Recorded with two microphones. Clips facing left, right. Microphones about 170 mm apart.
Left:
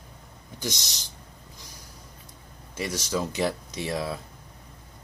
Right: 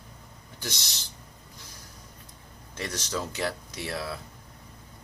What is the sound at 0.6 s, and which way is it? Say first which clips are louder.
Speech: left 5 dB; 15° left (ahead or behind).